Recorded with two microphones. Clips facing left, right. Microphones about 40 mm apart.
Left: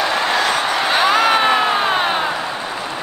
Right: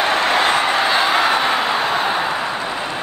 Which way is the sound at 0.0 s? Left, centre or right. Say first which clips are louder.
Right 1 dB; right.